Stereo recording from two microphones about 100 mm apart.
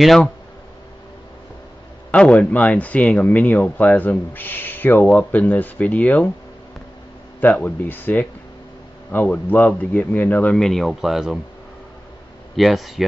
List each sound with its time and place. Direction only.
2.0 s speech: 10° left (ahead or behind)
7.3 s speech: 15° left (ahead or behind)
10.6 s speech: 5° left (ahead or behind)
12.5 s speech: centre (ahead or behind)